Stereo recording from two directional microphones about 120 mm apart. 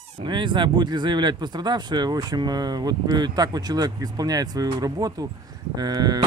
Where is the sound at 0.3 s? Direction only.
40° right (ahead or behind).